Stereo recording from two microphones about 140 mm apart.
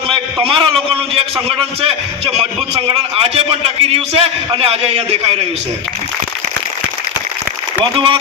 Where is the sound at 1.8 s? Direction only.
40° right (ahead or behind).